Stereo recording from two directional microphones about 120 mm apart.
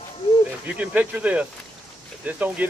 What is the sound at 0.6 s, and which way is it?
Speech, 10° right (ahead or behind).